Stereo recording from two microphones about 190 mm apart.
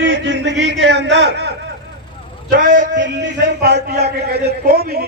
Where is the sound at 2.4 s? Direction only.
45° right (ahead or behind).